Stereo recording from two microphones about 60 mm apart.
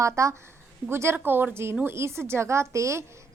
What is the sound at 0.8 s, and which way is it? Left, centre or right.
A woman's voice, right.